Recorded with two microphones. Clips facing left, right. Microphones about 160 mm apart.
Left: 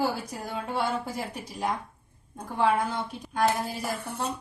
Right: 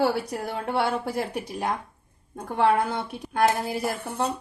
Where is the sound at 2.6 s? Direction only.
65° right (ahead or behind).